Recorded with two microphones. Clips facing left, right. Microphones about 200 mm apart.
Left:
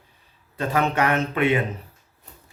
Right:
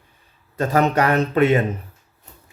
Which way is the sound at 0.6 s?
40° right (ahead or behind).